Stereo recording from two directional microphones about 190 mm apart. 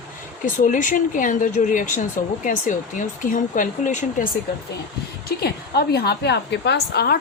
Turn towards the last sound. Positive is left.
turn(degrees=55)  # may be behind; listen again after turning